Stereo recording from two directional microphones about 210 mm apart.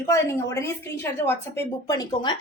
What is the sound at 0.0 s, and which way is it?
A woman's voice, 15° left (ahead or behind).